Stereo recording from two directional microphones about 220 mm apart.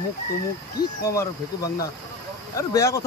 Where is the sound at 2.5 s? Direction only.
15° left (ahead or behind).